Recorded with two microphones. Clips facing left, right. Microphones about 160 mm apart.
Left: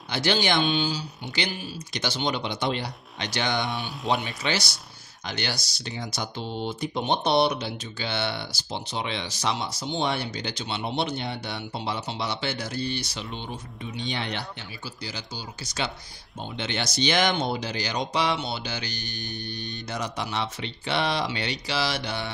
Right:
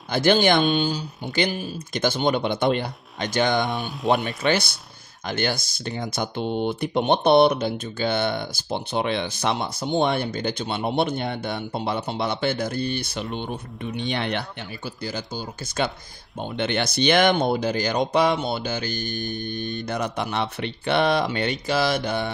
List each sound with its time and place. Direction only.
0.1 s speech: 50° right (ahead or behind)